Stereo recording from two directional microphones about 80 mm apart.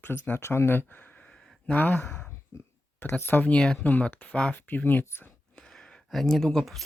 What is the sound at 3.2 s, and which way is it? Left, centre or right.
Speech, left.